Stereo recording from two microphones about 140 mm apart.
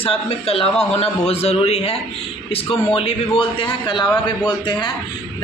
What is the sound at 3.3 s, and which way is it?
Speech, 35° left (ahead or behind).